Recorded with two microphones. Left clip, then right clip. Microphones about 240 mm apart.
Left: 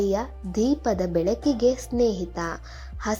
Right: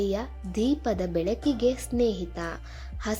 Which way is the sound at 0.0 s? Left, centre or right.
Centre.